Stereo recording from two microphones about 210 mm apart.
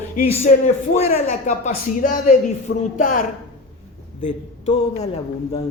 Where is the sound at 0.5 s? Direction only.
35° left (ahead or behind).